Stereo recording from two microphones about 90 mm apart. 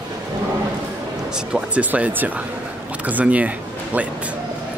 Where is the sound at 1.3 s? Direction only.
10° right (ahead or behind).